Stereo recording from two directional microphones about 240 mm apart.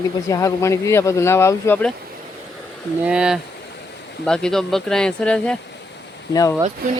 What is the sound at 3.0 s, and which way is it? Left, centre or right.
Speech, centre.